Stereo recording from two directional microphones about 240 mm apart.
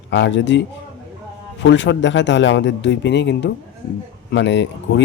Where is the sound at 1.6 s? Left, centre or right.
Left.